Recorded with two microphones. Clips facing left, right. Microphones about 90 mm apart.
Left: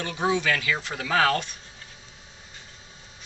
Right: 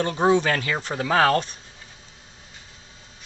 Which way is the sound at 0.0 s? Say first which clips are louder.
Right 6 dB; 40° right (ahead or behind).